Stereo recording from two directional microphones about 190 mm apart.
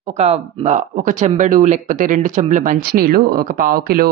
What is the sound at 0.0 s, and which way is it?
Speech, 35° right (ahead or behind).